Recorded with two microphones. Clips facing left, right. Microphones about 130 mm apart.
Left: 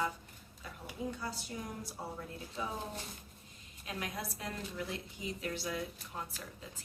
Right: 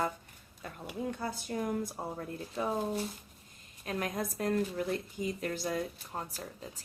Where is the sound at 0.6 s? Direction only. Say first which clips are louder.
Right 4 dB; 55° right (ahead or behind).